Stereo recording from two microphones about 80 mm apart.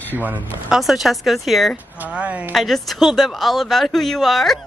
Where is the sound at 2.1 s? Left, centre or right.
Centre.